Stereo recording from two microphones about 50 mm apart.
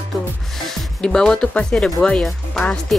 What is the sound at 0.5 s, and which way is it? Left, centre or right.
Music, centre.